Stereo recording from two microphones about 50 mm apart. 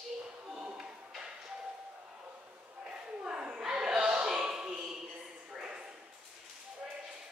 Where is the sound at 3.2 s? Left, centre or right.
Right.